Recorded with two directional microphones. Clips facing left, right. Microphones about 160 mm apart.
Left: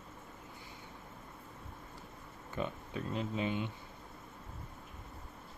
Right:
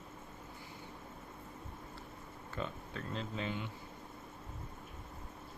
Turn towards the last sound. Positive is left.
turn(degrees=20)  # may be behind; listen again after turning